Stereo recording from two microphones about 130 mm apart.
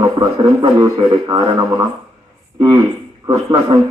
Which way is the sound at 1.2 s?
30° right (ahead or behind).